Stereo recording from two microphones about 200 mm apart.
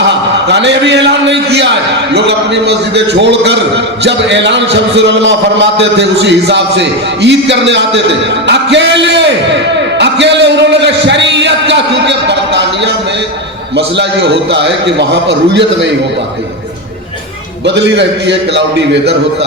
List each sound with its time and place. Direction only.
0.4 s a man's voice: 60° right (ahead or behind)
10.0 s a sound: 60° right (ahead or behind)
13.7 s a man's voice: 60° right (ahead or behind)
17.7 s a man's voice: 60° right (ahead or behind)